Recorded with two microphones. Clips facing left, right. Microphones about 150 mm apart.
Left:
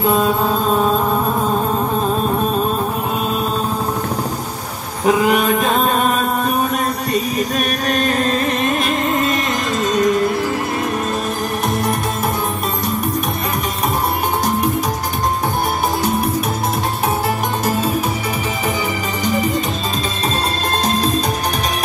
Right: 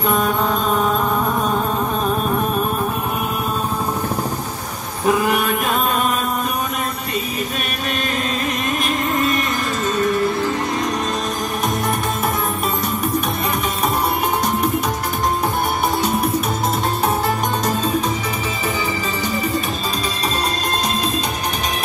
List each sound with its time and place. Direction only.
0.1 s mantra: 25° left (ahead or behind)
5.0 s a sound: 15° left (ahead or behind)
7.9 s music: 40° left (ahead or behind)
16.0 s music: centre (ahead or behind)